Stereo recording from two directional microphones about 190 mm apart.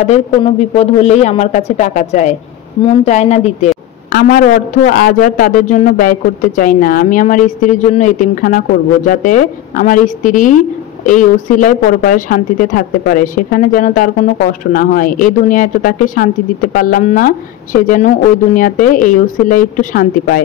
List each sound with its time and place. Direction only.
0.0 s speech: 35° left (ahead or behind)
4.1 s a man's voice: 45° left (ahead or behind)